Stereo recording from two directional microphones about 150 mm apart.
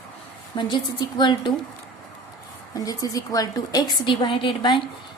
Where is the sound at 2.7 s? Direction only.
25° left (ahead or behind).